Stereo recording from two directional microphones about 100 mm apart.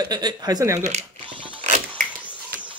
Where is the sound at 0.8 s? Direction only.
90° right.